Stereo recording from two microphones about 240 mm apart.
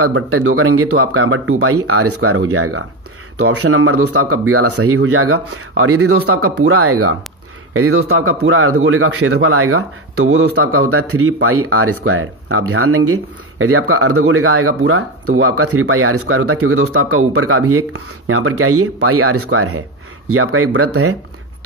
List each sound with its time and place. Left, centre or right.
0.0 s speech: right